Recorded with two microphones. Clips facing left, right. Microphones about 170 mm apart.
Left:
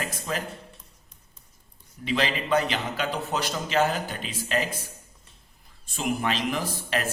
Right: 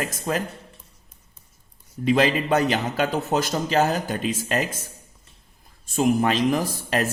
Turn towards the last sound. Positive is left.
turn(degrees=-40)  # may be behind; listen again after turning